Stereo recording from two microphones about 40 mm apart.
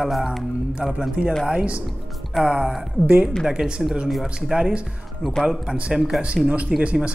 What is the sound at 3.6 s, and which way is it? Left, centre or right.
Speech, centre.